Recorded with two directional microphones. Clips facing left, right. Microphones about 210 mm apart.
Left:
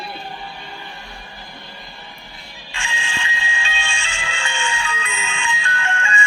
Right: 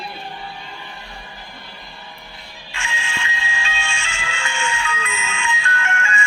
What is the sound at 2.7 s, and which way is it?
Music, 30° left (ahead or behind).